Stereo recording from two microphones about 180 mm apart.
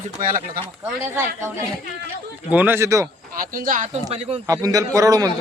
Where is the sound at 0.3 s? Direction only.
50° right (ahead or behind).